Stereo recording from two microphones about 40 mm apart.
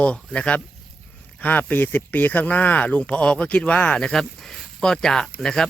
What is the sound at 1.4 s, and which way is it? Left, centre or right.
Speech, left.